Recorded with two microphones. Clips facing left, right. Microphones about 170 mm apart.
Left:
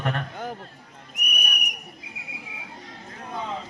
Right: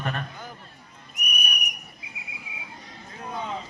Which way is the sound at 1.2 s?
90° left.